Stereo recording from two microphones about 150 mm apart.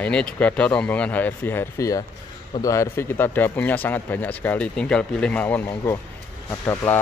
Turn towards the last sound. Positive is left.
turn(degrees=15)  # may be behind; listen again after turning